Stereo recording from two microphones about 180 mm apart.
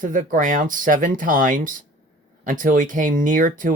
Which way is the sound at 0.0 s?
45° right (ahead or behind).